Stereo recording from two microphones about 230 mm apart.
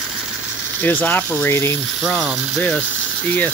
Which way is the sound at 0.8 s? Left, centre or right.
Centre.